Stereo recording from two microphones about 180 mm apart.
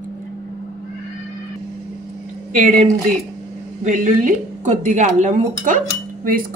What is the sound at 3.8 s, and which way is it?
Speech, 45° right (ahead or behind).